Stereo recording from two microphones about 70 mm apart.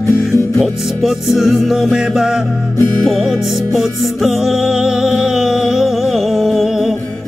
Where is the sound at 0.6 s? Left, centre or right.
Centre.